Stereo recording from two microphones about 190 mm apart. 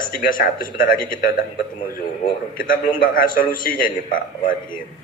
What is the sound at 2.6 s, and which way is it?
A man's voice, 50° left (ahead or behind).